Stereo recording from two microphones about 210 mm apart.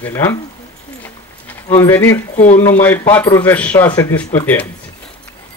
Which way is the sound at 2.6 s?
10° left (ahead or behind).